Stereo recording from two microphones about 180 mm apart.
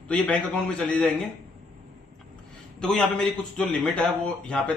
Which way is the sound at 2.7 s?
5° left (ahead or behind).